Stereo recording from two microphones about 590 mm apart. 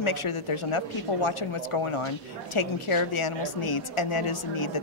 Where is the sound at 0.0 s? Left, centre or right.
Left.